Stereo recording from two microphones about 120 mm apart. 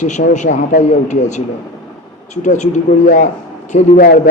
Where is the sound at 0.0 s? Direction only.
90° left.